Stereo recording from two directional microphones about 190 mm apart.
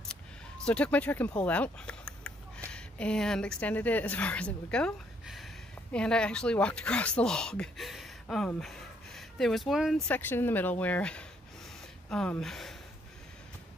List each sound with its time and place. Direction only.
0.7 s speech: 5° left (ahead or behind)